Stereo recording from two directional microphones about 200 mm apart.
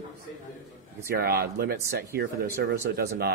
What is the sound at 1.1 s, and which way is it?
Speech, 50° right (ahead or behind).